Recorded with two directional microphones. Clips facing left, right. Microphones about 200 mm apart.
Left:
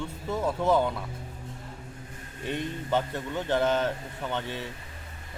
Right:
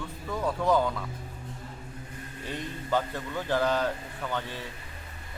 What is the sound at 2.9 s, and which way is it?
A man's voice, 25° left (ahead or behind).